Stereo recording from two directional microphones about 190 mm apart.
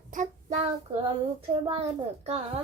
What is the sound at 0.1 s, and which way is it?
Child singing, 40° right (ahead or behind).